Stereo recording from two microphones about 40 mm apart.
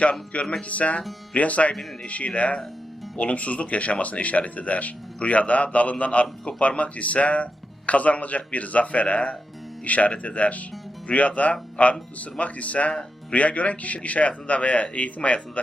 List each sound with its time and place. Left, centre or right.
0.0 s speech: left